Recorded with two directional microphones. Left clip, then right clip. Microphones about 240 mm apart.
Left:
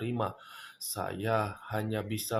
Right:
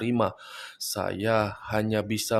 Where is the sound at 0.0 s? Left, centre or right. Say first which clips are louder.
Right 8 dB; right.